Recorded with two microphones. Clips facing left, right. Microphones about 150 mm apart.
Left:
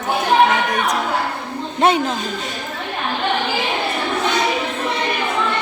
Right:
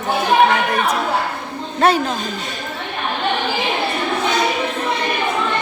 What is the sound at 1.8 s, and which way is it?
Speech, 25° left (ahead or behind).